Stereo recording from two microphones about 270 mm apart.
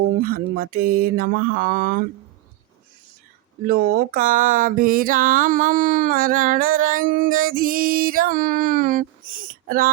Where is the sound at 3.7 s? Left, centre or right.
Right.